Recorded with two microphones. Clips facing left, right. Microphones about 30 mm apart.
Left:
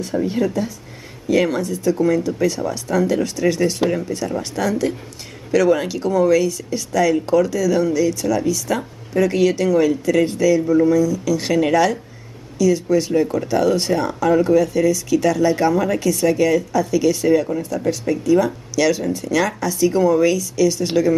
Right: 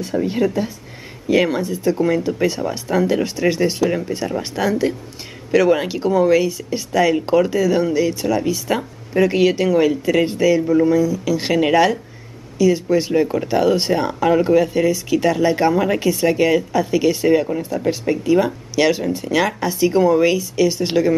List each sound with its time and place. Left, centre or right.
0.0 s speech: centre